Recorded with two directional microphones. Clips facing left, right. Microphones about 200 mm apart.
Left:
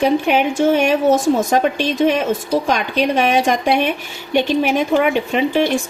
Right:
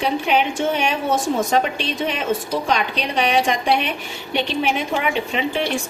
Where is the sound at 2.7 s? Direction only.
45° left (ahead or behind).